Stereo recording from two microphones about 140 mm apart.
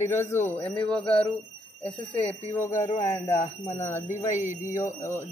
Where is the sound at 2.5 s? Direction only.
20° left (ahead or behind).